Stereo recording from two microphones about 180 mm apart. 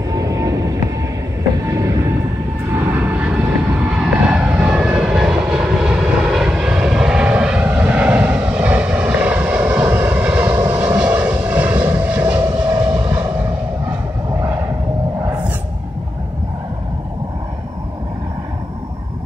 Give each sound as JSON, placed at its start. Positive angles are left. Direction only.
{"t": 0.1, "sound": "vehicle", "side_deg": -20}
{"t": 1.7, "sound": "train", "side_deg": -15}
{"t": 2.7, "sound": "vehicle", "side_deg": -10}